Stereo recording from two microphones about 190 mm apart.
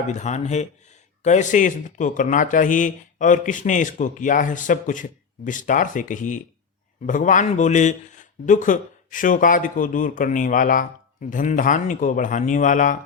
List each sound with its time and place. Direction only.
0.1 s speech: 40° left (ahead or behind)